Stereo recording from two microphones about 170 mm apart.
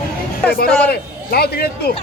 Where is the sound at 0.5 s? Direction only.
65° left (ahead or behind).